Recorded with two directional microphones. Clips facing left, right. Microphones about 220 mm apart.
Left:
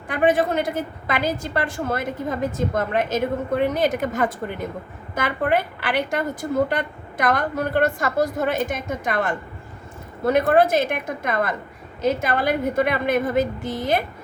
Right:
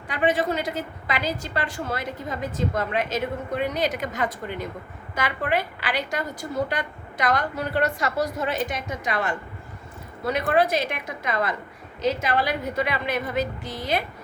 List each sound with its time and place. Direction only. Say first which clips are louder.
0.1 s a woman's voice: left 4 dB; 50° left (ahead or behind)